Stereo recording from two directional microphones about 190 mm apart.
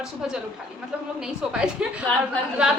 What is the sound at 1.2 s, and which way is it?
Speech, 5° right (ahead or behind).